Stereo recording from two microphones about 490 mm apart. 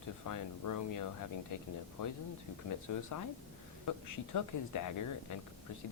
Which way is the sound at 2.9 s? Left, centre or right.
Left.